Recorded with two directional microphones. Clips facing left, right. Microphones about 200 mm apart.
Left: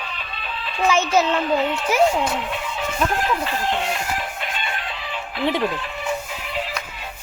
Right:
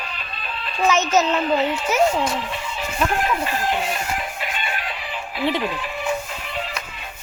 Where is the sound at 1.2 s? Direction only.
Centre (ahead or behind).